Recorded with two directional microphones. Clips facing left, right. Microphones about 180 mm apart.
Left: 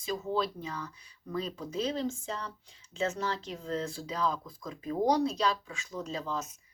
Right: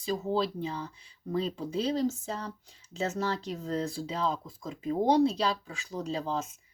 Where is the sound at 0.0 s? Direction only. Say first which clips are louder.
Right 2 dB; 35° right (ahead or behind).